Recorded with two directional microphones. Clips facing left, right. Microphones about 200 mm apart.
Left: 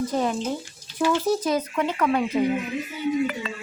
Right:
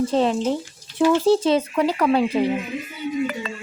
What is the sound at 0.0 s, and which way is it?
A woman's voice, 25° right (ahead or behind).